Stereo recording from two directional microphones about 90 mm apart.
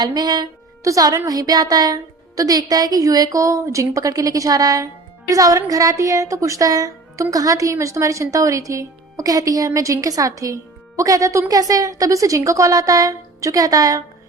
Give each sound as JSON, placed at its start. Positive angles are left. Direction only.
{"t": 0.0, "sound": "a woman's voice", "side_deg": -50}
{"t": 0.9, "sound": "a woman's voice", "side_deg": -40}